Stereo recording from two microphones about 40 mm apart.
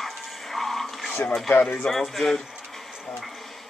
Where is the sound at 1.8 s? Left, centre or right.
Centre.